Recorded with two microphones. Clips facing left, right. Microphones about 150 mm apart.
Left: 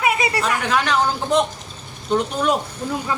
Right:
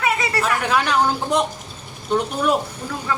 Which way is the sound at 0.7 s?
10° right (ahead or behind).